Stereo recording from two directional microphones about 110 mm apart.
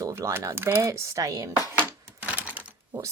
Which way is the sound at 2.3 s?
15° right (ahead or behind).